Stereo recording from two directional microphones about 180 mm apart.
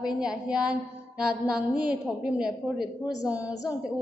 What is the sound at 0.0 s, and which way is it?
A woman's voice, 5° right (ahead or behind).